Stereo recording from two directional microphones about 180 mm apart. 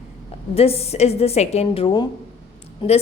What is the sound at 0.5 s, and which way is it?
A woman's voice, 35° left (ahead or behind).